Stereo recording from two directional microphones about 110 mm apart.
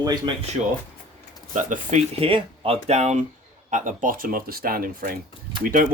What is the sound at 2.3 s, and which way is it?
Speech, 55° right (ahead or behind).